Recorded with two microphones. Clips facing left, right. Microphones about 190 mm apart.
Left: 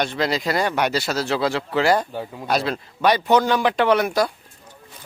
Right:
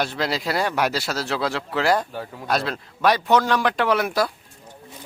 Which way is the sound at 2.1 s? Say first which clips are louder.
Left 2 dB; 15° left (ahead or behind).